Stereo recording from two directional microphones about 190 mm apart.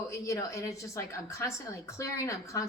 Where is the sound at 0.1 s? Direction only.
15° left (ahead or behind).